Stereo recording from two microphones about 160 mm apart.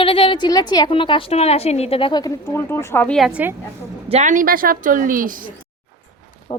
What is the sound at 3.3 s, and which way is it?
Speech, 10° right (ahead or behind).